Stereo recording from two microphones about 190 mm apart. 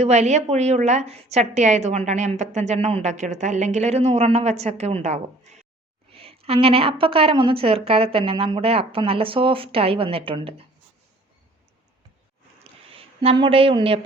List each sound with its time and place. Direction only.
0.0 s a woman's voice: 35° right (ahead or behind)
12.9 s a woman's voice: 30° right (ahead or behind)